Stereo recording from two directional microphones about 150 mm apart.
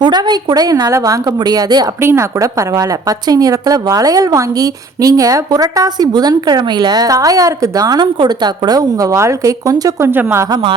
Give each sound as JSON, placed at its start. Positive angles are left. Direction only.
{"t": 0.0, "sound": "a woman's voice", "side_deg": -30}
{"t": 10.5, "sound": "speech", "side_deg": -35}